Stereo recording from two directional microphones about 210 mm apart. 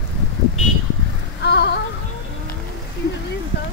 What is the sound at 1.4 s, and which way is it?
Music, 55° left (ahead or behind).